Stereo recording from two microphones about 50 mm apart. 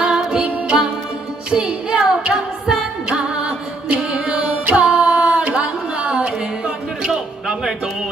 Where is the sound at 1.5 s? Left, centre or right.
Centre.